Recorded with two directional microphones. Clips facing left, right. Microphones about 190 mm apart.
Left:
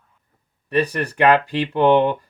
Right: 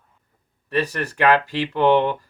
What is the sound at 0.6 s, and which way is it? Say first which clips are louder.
Speech: left 3 dB; 15° left (ahead or behind).